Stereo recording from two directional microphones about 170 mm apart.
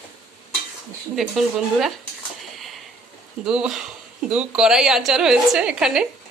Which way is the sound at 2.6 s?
Centre (ahead or behind).